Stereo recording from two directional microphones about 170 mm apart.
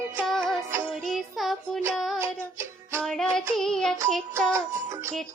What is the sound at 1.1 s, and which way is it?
Child singing, centre (ahead or behind).